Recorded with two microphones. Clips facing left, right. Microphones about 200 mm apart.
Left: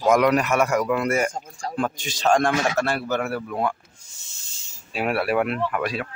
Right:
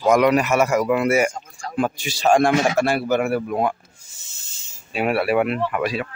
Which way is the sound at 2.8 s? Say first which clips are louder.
Right 5 dB; 10° right (ahead or behind).